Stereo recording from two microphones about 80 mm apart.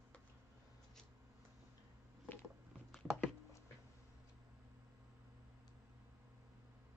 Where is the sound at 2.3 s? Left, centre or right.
Left.